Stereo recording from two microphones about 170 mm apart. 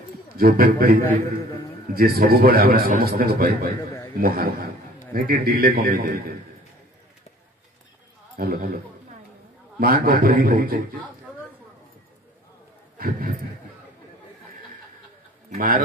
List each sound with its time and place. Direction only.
0.4 s speech: 60° right (ahead or behind)
8.4 s speech: 60° right (ahead or behind)
9.8 s speech: 60° right (ahead or behind)
12.9 s speech: 55° right (ahead or behind)
15.5 s speech: 55° right (ahead or behind)